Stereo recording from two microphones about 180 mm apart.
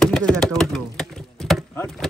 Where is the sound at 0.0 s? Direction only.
5° left (ahead or behind).